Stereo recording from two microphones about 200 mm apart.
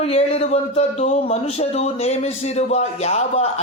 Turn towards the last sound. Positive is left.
turn(degrees=30)  # may be behind; listen again after turning